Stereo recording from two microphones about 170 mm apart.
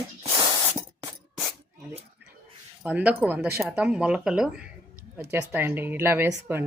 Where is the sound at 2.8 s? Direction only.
10° right (ahead or behind).